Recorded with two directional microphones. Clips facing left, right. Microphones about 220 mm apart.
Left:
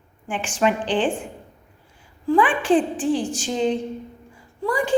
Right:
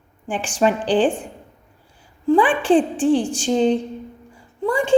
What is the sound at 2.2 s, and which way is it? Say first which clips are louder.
A woman's voice: right 3 dB; 30° right (ahead or behind).